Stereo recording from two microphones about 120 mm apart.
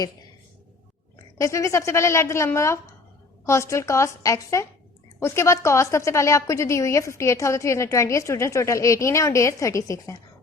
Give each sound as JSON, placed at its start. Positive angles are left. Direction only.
{"t": 1.4, "sound": "a woman's voice", "side_deg": 25}